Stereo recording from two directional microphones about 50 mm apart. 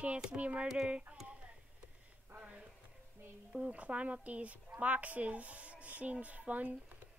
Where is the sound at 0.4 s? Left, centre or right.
Right.